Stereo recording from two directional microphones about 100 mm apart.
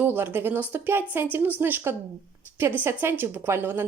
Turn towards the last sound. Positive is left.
turn(degrees=-20)  # may be behind; listen again after turning